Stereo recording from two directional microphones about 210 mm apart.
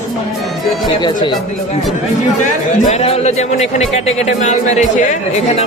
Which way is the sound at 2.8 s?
30° left (ahead or behind).